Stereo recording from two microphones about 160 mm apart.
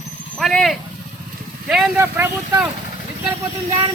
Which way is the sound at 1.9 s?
15° right (ahead or behind).